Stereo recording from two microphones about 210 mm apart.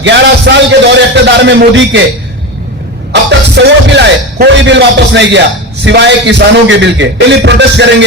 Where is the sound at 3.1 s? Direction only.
55° right (ahead or behind).